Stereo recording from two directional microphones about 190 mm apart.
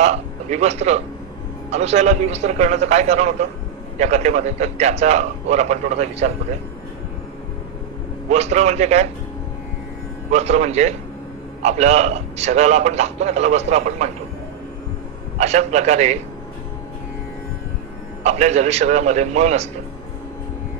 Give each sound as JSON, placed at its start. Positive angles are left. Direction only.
{"t": 0.0, "sound": "a man's voice", "side_deg": -35}
{"t": 8.3, "sound": "a man's voice", "side_deg": -35}
{"t": 10.3, "sound": "a man's voice", "side_deg": -35}
{"t": 15.3, "sound": "a man's voice", "side_deg": -35}
{"t": 18.2, "sound": "a man's voice", "side_deg": -35}